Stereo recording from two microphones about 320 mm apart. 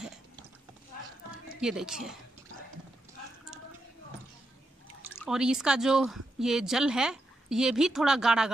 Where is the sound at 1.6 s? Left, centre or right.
Centre.